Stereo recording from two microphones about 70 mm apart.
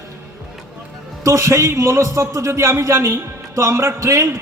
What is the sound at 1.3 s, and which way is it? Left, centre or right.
A man's voice, right.